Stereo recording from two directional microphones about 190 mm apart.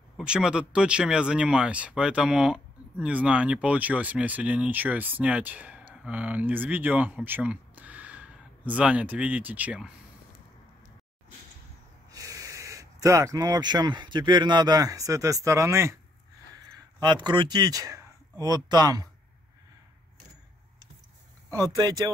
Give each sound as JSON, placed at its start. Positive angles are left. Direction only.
{"t": 0.2, "sound": "speech", "side_deg": -5}
{"t": 12.1, "sound": "speech", "side_deg": -15}
{"t": 17.0, "sound": "speech", "side_deg": -25}
{"t": 21.7, "sound": "speech", "side_deg": -20}